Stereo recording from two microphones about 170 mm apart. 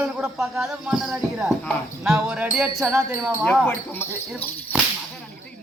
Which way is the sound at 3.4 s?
10° left (ahead or behind).